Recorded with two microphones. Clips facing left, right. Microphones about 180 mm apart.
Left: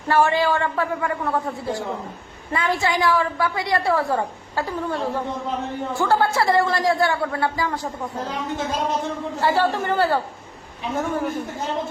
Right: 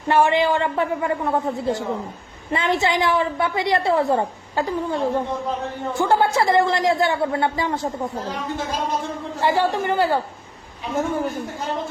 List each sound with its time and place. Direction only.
0.1 s a woman's voice: 20° right (ahead or behind)
9.4 s speech: 15° right (ahead or behind)